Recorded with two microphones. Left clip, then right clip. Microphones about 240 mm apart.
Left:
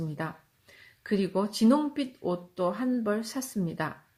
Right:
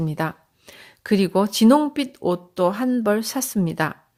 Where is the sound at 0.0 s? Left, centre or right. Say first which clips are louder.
Right 10 dB; right.